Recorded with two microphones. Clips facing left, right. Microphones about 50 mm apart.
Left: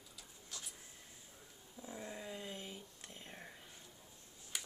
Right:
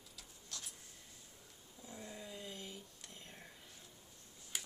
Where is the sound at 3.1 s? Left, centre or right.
Centre.